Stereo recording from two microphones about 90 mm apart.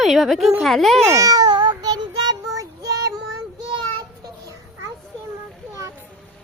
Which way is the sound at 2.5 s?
40° right (ahead or behind).